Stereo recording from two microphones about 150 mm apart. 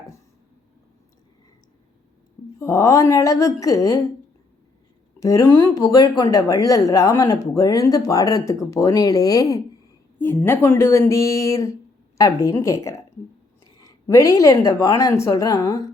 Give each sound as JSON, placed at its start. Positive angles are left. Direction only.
{"t": 2.6, "sound": "speech", "side_deg": 20}
{"t": 5.2, "sound": "speech", "side_deg": 20}